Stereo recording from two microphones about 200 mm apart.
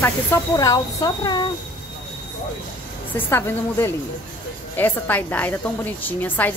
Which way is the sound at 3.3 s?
15° left (ahead or behind).